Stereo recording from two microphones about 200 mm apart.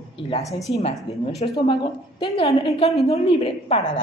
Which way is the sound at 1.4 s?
35° left (ahead or behind).